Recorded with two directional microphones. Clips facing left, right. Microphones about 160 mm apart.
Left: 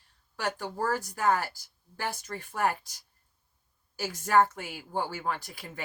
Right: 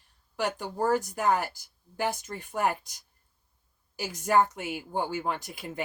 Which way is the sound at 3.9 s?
15° right (ahead or behind).